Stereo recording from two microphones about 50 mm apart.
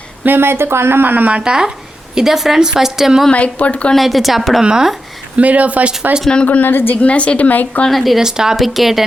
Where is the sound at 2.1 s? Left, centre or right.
Centre.